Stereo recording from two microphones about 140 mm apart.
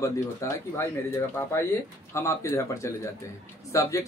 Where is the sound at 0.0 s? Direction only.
20° left (ahead or behind).